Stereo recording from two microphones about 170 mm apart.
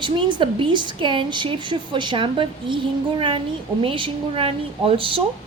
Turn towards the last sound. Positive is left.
turn(degrees=-30)  # may be behind; listen again after turning